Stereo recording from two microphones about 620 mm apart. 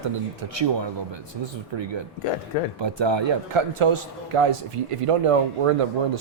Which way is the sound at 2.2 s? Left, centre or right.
Left.